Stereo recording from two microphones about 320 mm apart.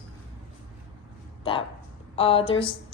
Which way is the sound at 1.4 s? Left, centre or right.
Centre.